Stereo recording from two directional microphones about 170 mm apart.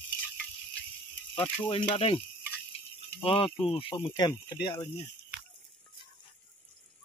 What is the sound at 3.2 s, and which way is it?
A man's voice, 30° left (ahead or behind).